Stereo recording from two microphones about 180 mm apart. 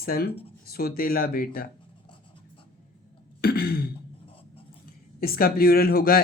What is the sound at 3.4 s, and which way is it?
Speech, 60° left (ahead or behind).